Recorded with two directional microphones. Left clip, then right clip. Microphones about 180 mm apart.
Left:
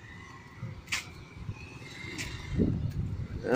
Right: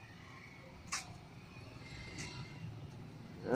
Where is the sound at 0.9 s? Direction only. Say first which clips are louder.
Left 9 dB; 50° left (ahead or behind).